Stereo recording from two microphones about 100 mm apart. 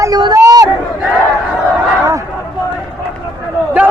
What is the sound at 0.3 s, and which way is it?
Chatter, 35° right (ahead or behind).